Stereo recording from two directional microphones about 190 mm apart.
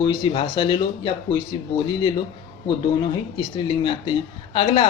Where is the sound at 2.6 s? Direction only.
25° left (ahead or behind).